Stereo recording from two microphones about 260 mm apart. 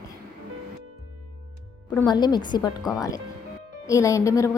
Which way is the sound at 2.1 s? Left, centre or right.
Centre.